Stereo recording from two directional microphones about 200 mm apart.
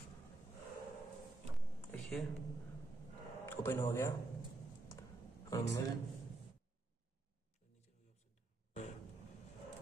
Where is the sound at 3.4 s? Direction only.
10° left (ahead or behind).